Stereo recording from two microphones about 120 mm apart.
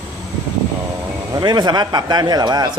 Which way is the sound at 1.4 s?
35° right (ahead or behind).